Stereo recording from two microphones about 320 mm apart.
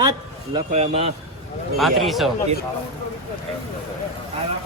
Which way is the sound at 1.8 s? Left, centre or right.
Centre.